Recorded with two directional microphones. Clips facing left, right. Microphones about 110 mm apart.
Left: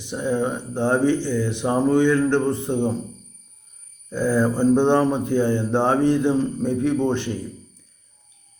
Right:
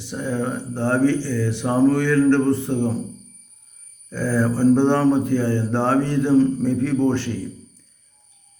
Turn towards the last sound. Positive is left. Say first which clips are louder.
# right 1 dB
turn(degrees=15)  # may be behind; listen again after turning